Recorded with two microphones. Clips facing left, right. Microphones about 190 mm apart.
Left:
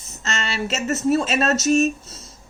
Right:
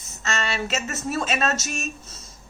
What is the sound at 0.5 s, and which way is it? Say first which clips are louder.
Speech: left 4 dB; 35° left (ahead or behind).